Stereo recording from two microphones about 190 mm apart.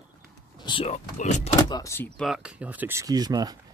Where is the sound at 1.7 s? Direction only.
15° left (ahead or behind).